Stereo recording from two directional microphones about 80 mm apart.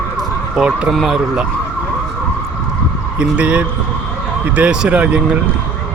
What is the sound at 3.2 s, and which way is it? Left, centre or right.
Speech, centre.